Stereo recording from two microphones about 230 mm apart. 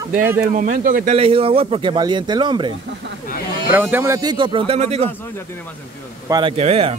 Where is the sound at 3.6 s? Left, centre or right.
Centre; by 5.1 s right.